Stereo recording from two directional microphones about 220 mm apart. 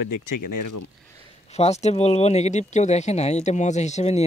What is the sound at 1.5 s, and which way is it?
Speech, 30° left (ahead or behind).